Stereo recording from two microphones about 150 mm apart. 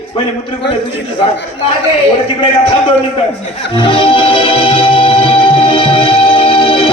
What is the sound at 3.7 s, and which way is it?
Music, 35° left (ahead or behind).